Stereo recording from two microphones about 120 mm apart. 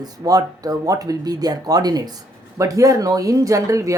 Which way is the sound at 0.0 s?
30° right (ahead or behind).